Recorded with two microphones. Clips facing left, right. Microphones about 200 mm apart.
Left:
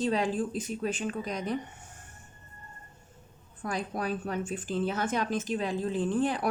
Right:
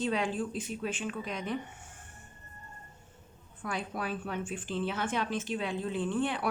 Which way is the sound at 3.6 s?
40° left (ahead or behind).